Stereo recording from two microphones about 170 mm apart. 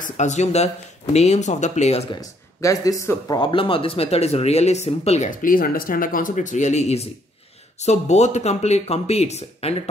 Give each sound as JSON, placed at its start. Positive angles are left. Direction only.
{"t": 0.0, "sound": "speech", "side_deg": 45}
{"t": 2.1, "sound": "speech", "side_deg": 20}